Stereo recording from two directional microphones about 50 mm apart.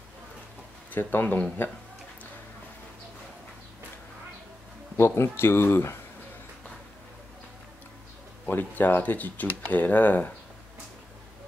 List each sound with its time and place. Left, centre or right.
0.9 s speech: left
4.9 s speech: left
8.5 s speech: left